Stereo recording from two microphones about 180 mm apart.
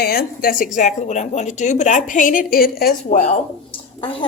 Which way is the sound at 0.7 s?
40° left (ahead or behind).